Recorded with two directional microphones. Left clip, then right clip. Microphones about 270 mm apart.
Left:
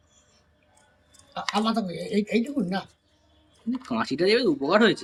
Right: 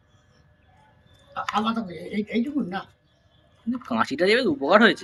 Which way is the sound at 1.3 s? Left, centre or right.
Left.